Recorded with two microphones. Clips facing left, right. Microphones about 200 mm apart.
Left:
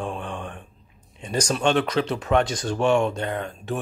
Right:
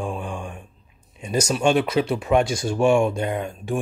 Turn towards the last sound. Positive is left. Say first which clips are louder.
# right 3 dB
turn(degrees=-10)  # may be behind; listen again after turning